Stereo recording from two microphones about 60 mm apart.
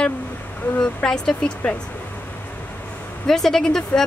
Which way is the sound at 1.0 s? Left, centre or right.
Centre.